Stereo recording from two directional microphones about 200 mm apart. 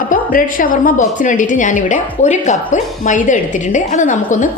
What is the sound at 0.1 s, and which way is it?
A woman's voice, 45° left (ahead or behind).